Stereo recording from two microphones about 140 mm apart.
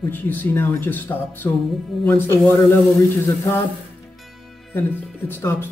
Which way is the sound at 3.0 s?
20° left (ahead or behind).